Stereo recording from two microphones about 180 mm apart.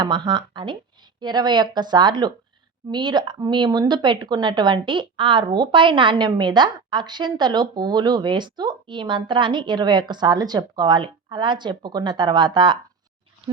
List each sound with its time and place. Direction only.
0.0 s speech: 25° right (ahead or behind)